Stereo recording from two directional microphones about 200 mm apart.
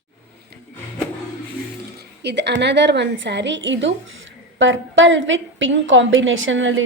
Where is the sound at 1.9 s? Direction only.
55° right (ahead or behind).